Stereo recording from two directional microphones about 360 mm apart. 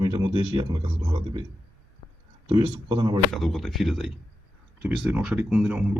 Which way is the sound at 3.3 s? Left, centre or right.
Centre.